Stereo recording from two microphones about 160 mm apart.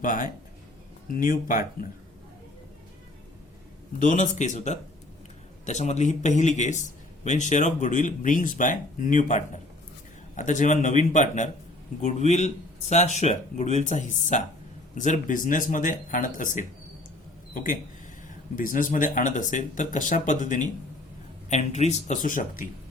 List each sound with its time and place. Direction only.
0.0 s speech: 55° left (ahead or behind)
4.0 s speech: 50° left (ahead or behind)